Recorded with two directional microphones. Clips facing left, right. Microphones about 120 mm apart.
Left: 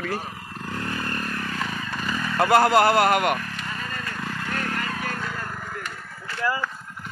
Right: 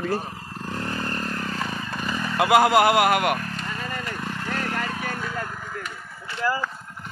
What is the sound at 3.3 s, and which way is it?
Vehicle, 35° right (ahead or behind).